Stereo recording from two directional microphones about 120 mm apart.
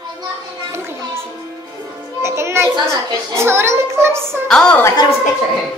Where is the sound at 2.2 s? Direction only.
20° right (ahead or behind).